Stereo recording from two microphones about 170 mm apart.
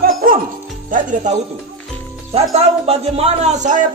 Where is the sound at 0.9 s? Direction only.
50° right (ahead or behind).